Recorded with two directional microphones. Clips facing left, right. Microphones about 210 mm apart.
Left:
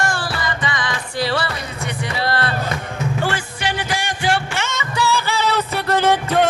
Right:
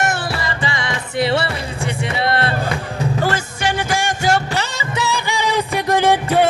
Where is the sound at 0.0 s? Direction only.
25° right (ahead or behind).